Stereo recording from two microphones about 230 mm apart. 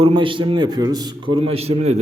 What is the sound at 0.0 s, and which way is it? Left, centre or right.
A man's voice, right.